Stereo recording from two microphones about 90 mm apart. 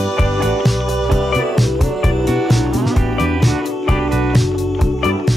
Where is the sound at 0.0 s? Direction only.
Centre (ahead or behind).